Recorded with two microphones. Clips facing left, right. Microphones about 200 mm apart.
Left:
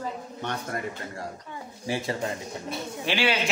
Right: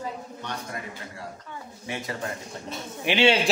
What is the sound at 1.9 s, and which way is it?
Speech, 30° left (ahead or behind).